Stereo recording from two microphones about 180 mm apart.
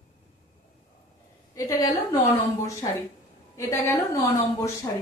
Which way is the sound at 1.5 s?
15° left (ahead or behind).